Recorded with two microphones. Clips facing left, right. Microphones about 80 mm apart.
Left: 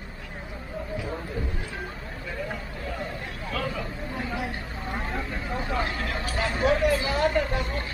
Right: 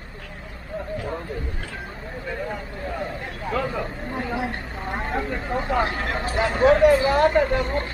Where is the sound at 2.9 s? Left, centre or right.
Right.